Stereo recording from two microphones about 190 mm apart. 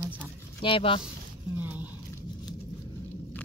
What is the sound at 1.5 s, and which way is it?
Speech, 10° right (ahead or behind).